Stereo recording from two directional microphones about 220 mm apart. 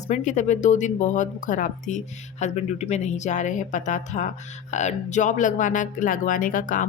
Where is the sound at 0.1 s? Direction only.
35° left (ahead or behind).